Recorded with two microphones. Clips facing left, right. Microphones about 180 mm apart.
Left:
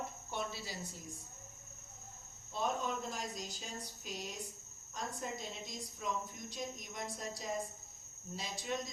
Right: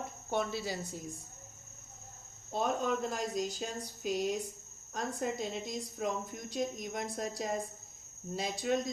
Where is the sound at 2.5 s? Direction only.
60° right (ahead or behind).